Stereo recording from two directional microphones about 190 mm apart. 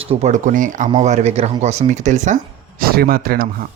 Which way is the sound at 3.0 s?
50° right (ahead or behind).